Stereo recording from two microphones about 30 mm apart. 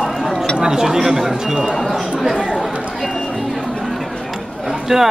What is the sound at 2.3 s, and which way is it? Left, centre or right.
Speech, centre.